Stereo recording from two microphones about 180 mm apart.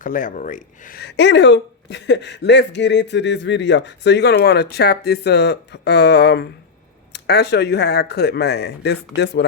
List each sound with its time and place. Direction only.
0.0 s speech: 45° left (ahead or behind); by 9.5 s 70° left (ahead or behind)